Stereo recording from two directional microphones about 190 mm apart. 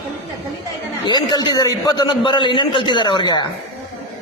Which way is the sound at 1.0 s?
20° left (ahead or behind).